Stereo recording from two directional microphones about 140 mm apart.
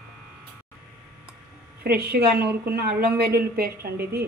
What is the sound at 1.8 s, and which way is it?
A woman's voice, 90° right.